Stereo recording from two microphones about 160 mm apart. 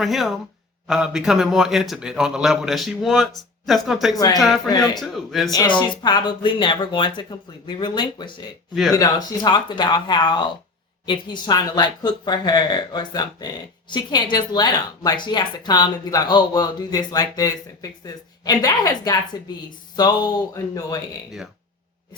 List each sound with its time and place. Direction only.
0.0 s a man's voice: centre (ahead or behind)
5.5 s speech: 25° left (ahead or behind)